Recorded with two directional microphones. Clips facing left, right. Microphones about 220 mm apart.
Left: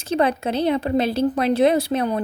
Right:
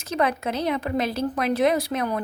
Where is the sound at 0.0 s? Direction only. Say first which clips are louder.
Left 4 dB; 30° left (ahead or behind).